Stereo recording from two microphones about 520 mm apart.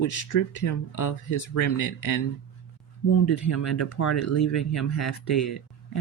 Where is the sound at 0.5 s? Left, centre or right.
Left.